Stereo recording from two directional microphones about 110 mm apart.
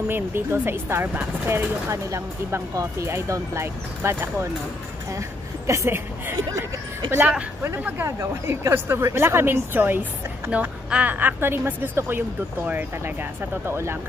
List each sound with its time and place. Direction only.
0.1 s a woman's voice: 20° right (ahead or behind)
5.7 s a woman's voice: 25° right (ahead or behind)
6.3 s speech: 30° right (ahead or behind)
7.2 s a woman's voice: 15° right (ahead or behind)